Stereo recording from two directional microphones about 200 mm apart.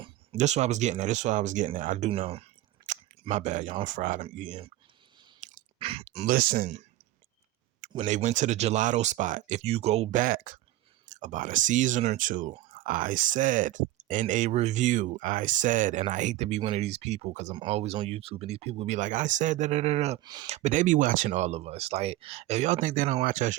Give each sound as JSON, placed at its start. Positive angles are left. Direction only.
{"t": 0.0, "sound": "speech", "side_deg": -30}
{"t": 5.4, "sound": "a sound", "side_deg": -30}
{"t": 6.2, "sound": "speech", "side_deg": -45}
{"t": 20.2, "sound": "speech", "side_deg": -20}
{"t": 20.5, "sound": "speech", "side_deg": -35}